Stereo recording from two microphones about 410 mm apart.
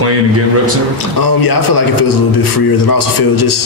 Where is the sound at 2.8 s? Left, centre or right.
Left.